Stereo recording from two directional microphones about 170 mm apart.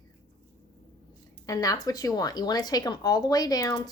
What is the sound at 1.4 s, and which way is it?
Speech, 20° left (ahead or behind).